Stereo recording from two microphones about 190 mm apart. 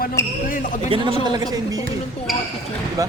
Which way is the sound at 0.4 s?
45° left (ahead or behind).